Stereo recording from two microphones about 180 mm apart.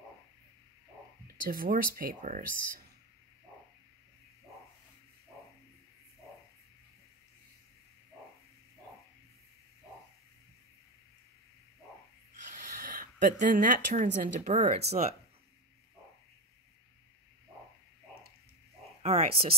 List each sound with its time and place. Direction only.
1.2 s speech: 50° right (ahead or behind)
12.4 s speech: 45° right (ahead or behind)
19.0 s speech: 35° right (ahead or behind)